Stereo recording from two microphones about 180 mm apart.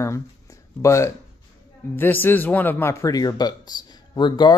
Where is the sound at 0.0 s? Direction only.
15° left (ahead or behind).